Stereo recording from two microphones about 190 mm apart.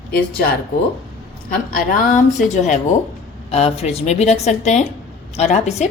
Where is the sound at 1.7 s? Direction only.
50° left (ahead or behind).